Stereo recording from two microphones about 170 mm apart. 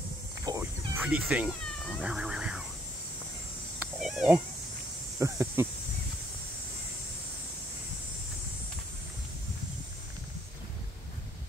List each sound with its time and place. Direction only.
0.5 s dog: 20° right (ahead or behind)
1.0 s speech: 5° right (ahead or behind)
3.8 s cat: centre (ahead or behind)
5.2 s speech: 15° right (ahead or behind)